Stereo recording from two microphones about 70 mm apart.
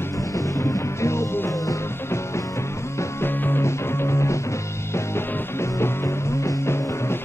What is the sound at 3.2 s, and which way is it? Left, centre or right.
Music, left.